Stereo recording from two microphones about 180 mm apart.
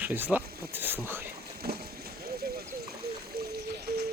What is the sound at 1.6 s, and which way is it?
Boat, 60° right (ahead or behind).